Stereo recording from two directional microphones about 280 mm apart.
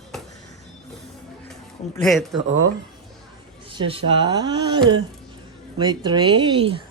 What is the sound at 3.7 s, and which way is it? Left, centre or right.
Speech, centre.